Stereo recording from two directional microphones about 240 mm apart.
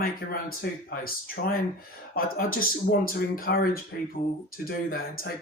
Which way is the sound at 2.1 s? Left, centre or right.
Left.